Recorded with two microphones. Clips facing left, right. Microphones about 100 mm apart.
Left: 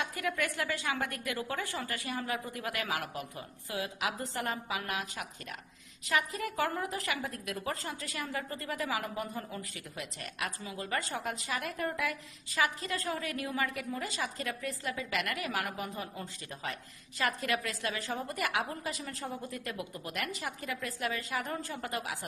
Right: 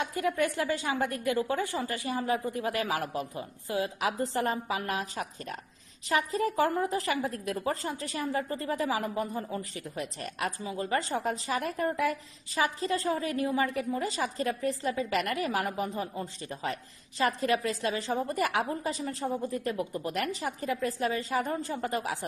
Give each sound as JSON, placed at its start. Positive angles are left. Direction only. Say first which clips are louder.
{"t": 0.0, "sound": "a woman's voice", "louder": "right 5 dB", "side_deg": -25}